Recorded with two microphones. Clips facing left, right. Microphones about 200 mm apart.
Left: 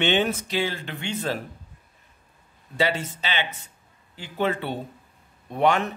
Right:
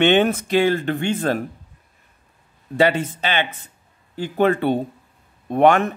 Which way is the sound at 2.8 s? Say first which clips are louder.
Right 7 dB; 55° right (ahead or behind).